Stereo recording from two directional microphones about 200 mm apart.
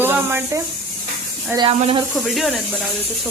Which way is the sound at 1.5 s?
25° right (ahead or behind).